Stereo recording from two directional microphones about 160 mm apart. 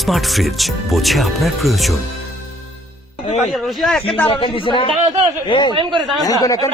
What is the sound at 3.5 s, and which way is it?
Speech, centre (ahead or behind).